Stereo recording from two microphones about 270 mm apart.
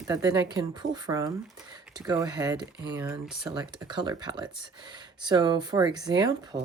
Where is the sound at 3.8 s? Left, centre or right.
Centre.